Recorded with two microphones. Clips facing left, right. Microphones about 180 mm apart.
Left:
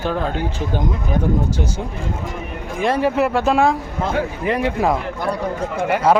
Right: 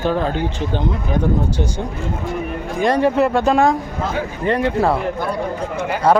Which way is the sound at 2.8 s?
5° left (ahead or behind).